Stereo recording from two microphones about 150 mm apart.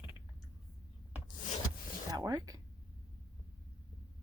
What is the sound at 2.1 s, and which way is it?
Speech, 25° right (ahead or behind).